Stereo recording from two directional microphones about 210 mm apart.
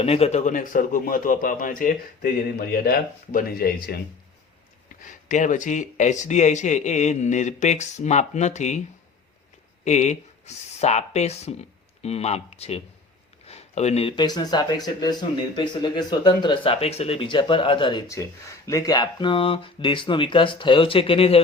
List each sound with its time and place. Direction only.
0.0 s speech: 30° left (ahead or behind); by 3.9 s 45° left (ahead or behind)
5.0 s speech: 35° left (ahead or behind)
9.8 s speech: 35° left (ahead or behind)